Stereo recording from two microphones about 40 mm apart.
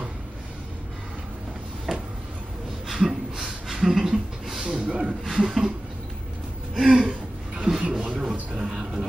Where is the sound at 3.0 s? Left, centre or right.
Centre.